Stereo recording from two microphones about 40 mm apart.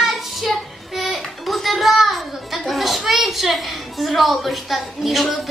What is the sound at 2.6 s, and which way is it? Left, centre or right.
A woman's voice, centre.